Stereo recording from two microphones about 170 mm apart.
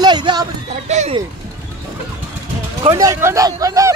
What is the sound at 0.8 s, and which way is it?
Speech, 40° right (ahead or behind).